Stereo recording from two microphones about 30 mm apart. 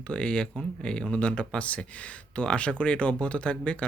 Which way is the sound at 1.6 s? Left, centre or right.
Left.